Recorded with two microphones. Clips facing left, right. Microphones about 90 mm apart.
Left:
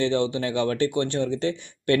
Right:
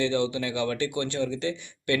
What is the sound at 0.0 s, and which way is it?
Speech, 35° left (ahead or behind).